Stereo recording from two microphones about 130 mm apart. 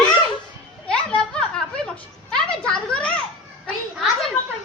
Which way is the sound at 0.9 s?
5° left (ahead or behind).